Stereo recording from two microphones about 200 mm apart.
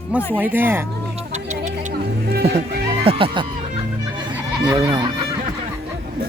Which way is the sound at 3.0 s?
25° right (ahead or behind).